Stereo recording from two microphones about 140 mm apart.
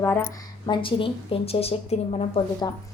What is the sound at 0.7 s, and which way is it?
A woman's voice, 40° left (ahead or behind).